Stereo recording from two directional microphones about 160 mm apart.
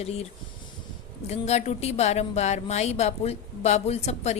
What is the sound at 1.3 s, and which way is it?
Speech, 40° left (ahead or behind).